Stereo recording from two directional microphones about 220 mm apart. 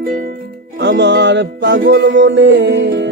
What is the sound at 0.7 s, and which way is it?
Music, 50° right (ahead or behind).